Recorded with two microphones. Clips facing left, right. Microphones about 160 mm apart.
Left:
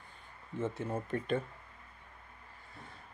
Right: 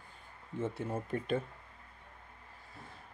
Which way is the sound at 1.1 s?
10° right (ahead or behind).